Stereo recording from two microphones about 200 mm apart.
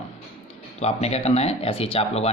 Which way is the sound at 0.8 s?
35° left (ahead or behind).